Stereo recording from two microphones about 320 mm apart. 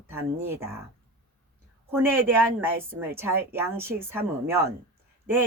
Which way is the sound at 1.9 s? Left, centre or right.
Centre.